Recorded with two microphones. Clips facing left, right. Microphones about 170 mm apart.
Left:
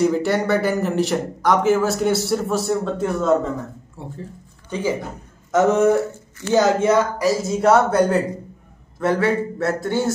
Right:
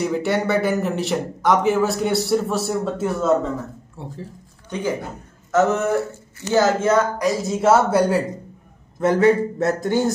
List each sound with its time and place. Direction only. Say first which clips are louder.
0.0 s a man's voice: left 2 dB; centre (ahead or behind)
5.5 s speech: left 3 dB; 15° left (ahead or behind); by 8.2 s 5° right (ahead or behind)
9.0 s speech: right 3 dB; 20° right (ahead or behind)